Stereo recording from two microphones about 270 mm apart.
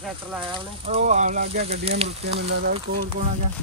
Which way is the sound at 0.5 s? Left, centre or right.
Right.